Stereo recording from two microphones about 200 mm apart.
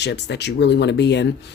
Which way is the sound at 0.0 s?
60° left (ahead or behind).